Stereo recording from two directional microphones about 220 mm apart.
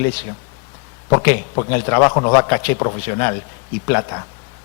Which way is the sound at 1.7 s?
20° left (ahead or behind).